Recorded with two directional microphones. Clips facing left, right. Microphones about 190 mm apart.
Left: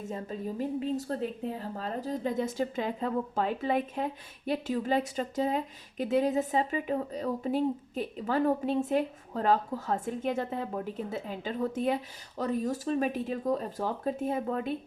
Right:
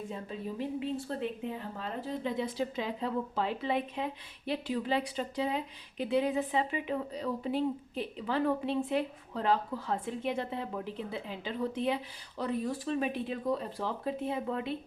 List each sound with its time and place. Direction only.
0.1 s a woman's voice: 45° left (ahead or behind)